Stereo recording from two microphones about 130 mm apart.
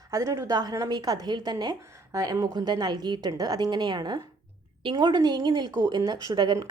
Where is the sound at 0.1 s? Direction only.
25° right (ahead or behind).